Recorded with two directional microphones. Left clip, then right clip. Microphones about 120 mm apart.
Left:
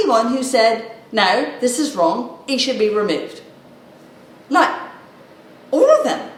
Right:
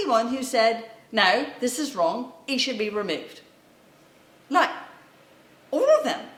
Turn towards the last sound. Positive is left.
turn(degrees=-25)  # may be behind; listen again after turning